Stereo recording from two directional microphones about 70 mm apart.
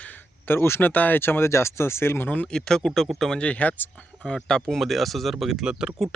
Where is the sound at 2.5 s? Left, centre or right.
Centre.